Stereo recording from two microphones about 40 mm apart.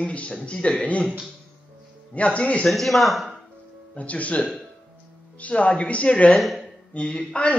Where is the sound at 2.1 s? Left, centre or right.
Left.